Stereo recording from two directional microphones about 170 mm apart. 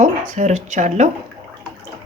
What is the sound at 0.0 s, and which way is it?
Speech, 45° right (ahead or behind).